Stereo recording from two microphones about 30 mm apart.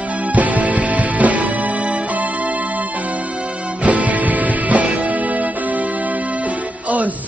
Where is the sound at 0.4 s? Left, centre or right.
Right.